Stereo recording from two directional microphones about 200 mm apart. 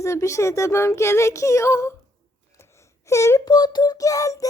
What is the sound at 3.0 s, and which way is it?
Speech, 15° left (ahead or behind).